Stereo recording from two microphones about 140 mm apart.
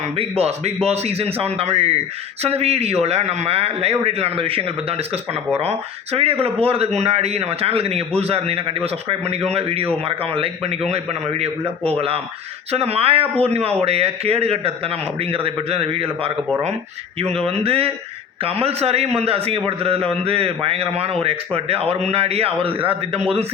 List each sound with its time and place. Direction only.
0.2 s speech: 50° right (ahead or behind)